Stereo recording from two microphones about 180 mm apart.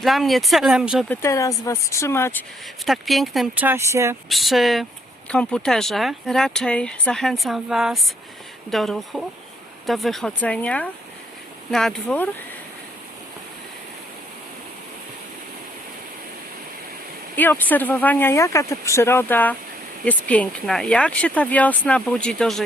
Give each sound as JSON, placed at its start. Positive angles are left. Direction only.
{"t": 0.0, "sound": "speech", "side_deg": 0}
{"t": 1.0, "sound": "speech", "side_deg": 10}
{"t": 2.8, "sound": "speech", "side_deg": 0}
{"t": 4.3, "sound": "speech", "side_deg": 0}
{"t": 17.3, "sound": "speech", "side_deg": 10}